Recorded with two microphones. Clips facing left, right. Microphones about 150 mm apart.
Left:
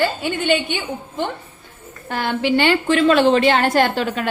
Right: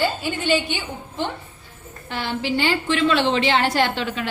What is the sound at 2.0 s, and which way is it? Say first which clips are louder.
Speech: left 5 dB; 50° left (ahead or behind).